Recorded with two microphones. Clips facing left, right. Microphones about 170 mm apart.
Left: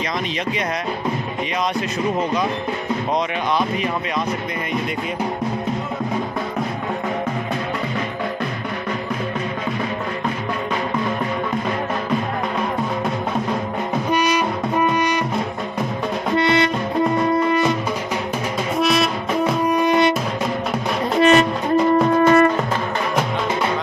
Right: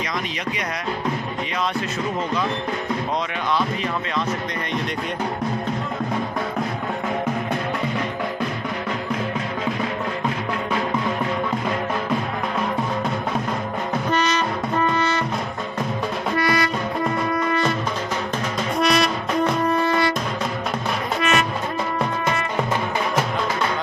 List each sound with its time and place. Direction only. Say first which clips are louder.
14.1 s brass instrument: left 3 dB; 10° left (ahead or behind)
16.3 s music: left 4 dB; 25° left (ahead or behind)
18.8 s music: left 1 dB; centre (ahead or behind); by 20.2 s 20° left (ahead or behind)
21.2 s music: left 9 dB; 35° left (ahead or behind)
22.2 s music: left 12 dB; 50° left (ahead or behind)